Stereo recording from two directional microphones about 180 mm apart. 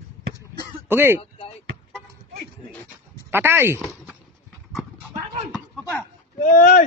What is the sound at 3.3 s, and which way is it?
Speech, 10° right (ahead or behind).